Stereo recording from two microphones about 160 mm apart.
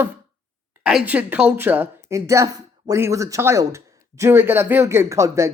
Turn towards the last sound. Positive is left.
turn(degrees=-20)  # may be behind; listen again after turning